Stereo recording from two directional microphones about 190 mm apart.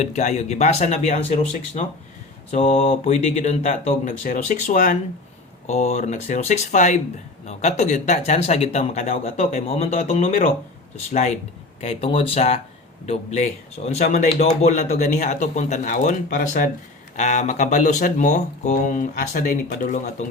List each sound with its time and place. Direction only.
0.0 s a man's voice: 35° left (ahead or behind)